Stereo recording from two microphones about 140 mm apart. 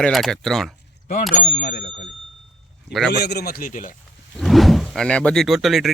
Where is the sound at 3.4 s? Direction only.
90° left; by 3.9 s 70° left (ahead or behind).